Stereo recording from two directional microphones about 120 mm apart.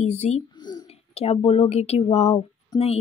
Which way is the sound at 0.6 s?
35° left (ahead or behind).